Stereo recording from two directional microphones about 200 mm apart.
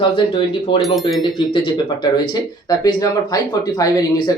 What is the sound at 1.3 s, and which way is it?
Speech, 25° left (ahead or behind).